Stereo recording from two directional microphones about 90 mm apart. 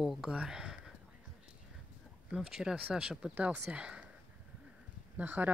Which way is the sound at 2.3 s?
5° right (ahead or behind).